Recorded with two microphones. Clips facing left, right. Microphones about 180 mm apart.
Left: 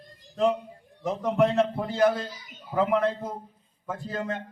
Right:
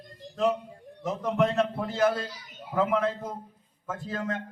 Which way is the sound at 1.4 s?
Centre (ahead or behind).